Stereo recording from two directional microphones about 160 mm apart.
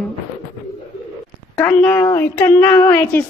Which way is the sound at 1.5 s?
10° left (ahead or behind).